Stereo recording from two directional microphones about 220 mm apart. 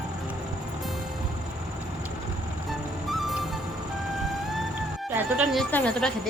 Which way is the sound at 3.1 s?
Centre (ahead or behind).